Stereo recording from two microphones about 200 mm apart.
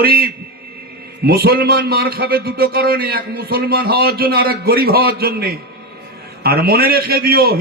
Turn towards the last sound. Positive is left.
turn(degrees=-50)  # may be behind; listen again after turning